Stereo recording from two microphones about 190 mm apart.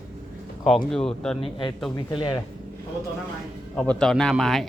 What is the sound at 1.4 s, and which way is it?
Speech, 25° left (ahead or behind).